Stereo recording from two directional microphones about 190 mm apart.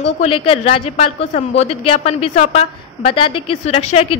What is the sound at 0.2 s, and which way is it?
A woman's voice, 30° left (ahead or behind).